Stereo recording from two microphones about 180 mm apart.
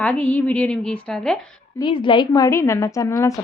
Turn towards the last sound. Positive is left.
turn(degrees=15)  # may be behind; listen again after turning